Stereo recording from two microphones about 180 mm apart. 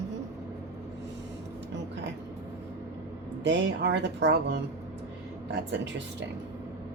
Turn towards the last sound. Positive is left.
turn(degrees=-75)  # may be behind; listen again after turning